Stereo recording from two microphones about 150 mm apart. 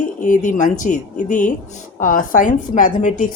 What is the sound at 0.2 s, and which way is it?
Speech, 60° left (ahead or behind).